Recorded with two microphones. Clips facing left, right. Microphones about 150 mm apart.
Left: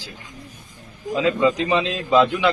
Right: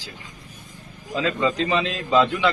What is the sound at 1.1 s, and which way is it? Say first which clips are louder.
A man's voice: left 4 dB; 15° left (ahead or behind).